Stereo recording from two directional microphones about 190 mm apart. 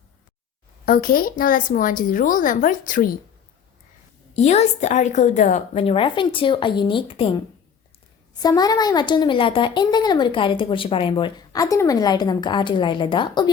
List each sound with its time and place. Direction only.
0.9 s a woman's voice: 50° left (ahead or behind)
4.4 s a woman's voice: 35° left (ahead or behind)